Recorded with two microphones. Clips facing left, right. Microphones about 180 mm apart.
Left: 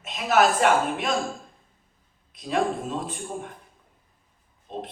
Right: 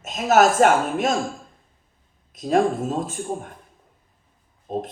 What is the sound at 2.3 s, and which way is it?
Speech, 45° right (ahead or behind).